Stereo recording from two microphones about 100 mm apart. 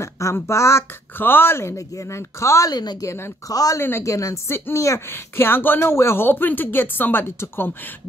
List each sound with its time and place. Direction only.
0.0 s a woman's voice: 30° left (ahead or behind)
2.7 s a woman's voice: 40° left (ahead or behind)
3.1 s a woman's voice: 30° left (ahead or behind)